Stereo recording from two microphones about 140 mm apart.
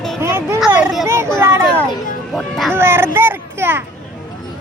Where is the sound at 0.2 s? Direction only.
20° right (ahead or behind).